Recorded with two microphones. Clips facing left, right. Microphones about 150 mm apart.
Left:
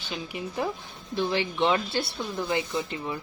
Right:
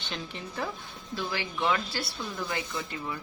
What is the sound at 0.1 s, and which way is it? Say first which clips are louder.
Speech: left 5 dB; 15° left (ahead or behind).